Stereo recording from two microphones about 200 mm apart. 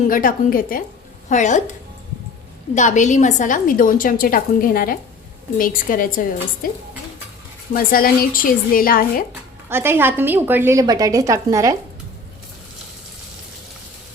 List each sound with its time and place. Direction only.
0.1 s a woman's voice: 45° left (ahead or behind)
2.7 s a woman's voice: 35° left (ahead or behind)
7.7 s a woman's voice: 45° left (ahead or behind)
9.6 s a woman's voice: 10° right (ahead or behind)